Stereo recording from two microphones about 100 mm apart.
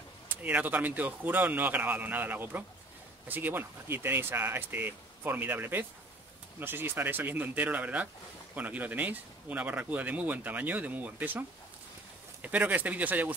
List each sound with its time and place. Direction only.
0.4 s speech: 15° right (ahead or behind)